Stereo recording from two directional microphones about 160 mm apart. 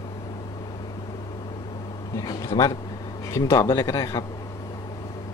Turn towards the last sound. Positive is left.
turn(degrees=20)  # may be behind; listen again after turning